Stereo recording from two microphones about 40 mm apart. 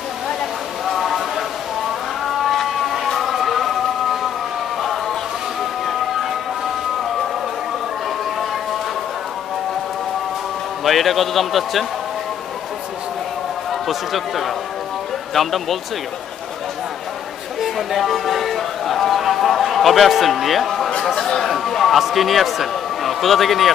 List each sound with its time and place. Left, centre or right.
0.8 s a sound: centre
2.5 s a sound: centre
3.2 s music: centre
10.8 s speech: centre
13.7 s a man's voice: centre
17.6 s music: centre
21.1 s speech: centre
21.4 s speech: centre